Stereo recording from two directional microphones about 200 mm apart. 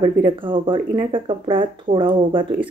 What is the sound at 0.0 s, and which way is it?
Speech, 25° right (ahead or behind).